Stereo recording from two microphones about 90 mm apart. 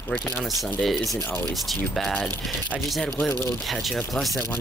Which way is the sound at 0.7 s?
Centre (ahead or behind).